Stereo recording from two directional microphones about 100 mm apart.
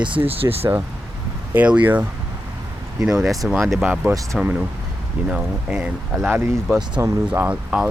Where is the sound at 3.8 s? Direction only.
15° right (ahead or behind).